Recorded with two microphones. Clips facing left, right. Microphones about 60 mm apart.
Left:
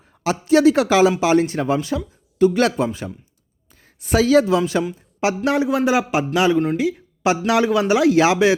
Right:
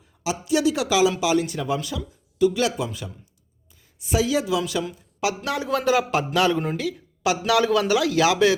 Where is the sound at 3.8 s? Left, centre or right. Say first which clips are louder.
Left 5 dB; left.